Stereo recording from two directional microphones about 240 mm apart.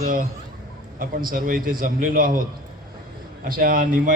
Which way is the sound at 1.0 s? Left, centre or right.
Right.